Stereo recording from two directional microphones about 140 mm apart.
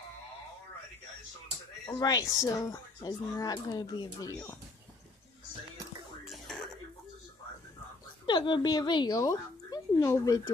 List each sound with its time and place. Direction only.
1.9 s speech: 30° left (ahead or behind)
6.2 s throat clearing: centre (ahead or behind)
8.3 s speech: 35° left (ahead or behind)